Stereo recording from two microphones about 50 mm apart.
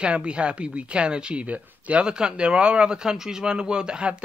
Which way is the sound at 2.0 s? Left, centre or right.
Centre.